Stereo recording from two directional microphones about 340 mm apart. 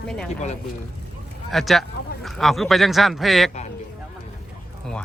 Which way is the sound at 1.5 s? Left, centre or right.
Centre.